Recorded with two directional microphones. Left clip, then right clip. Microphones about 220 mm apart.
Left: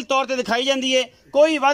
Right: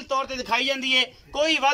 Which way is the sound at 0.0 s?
45° left (ahead or behind).